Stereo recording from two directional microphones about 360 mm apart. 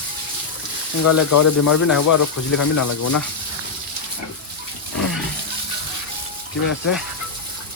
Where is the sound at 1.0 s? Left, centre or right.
Left.